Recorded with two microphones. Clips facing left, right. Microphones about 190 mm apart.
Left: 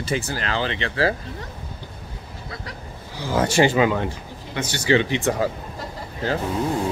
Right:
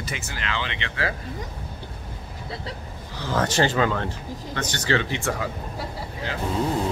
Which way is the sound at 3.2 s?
10° left (ahead or behind).